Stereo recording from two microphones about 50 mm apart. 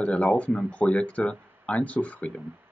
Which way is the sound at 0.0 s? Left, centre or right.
Left.